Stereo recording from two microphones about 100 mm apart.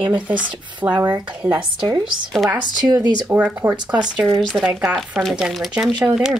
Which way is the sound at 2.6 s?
45° right (ahead or behind).